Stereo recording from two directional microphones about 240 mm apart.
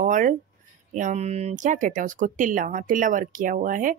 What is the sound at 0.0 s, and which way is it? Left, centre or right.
Speech, right.